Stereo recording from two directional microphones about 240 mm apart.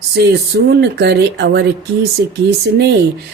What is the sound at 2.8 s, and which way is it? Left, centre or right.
Speech, right.